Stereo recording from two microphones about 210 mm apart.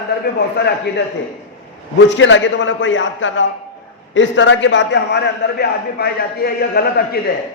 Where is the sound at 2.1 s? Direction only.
60° left (ahead or behind).